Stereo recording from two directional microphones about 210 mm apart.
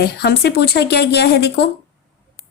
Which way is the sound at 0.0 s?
50° left (ahead or behind).